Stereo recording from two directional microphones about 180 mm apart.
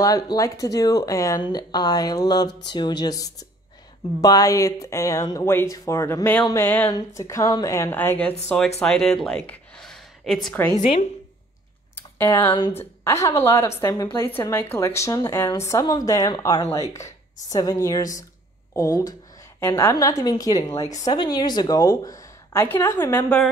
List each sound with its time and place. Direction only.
0.0 s speech: 20° left (ahead or behind)
10.8 s speech: 40° left (ahead or behind)
11.9 s computer keyboard: 10° left (ahead or behind)
12.4 s speech: 25° left (ahead or behind)